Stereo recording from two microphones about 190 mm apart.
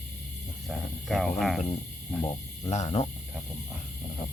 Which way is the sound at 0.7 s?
Centre (ahead or behind).